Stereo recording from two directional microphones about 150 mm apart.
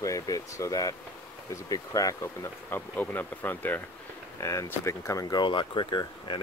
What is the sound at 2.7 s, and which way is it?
Speech, 10° left (ahead or behind).